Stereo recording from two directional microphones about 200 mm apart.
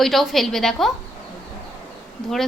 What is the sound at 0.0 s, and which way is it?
Speech, centre (ahead or behind).